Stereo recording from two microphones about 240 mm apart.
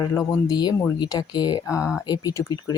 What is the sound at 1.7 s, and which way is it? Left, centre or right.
Speech, centre.